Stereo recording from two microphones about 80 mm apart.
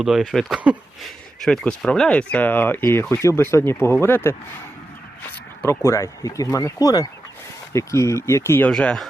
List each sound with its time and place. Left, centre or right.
0.0 s speech: centre; by 4.4 s left
5.6 s speech: left
7.7 s speech: left